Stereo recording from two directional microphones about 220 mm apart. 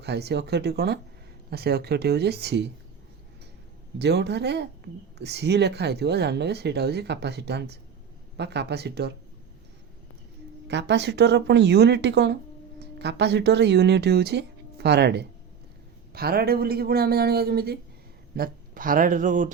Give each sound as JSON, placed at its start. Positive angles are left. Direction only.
{"t": 0.0, "sound": "speech", "side_deg": -50}
{"t": 3.9, "sound": "speech", "side_deg": -50}
{"t": 10.7, "sound": "speech", "side_deg": -50}